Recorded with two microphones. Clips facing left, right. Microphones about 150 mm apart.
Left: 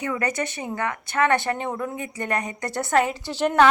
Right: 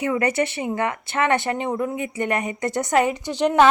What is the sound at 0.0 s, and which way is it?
A woman's voice, 20° right (ahead or behind).